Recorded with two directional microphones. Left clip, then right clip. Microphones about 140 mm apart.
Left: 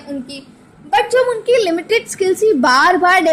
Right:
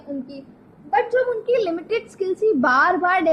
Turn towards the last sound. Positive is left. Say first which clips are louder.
# left 6 dB
turn(degrees=25)  # may be behind; listen again after turning